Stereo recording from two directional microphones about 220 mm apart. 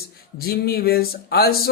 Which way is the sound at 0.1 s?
45° left (ahead or behind).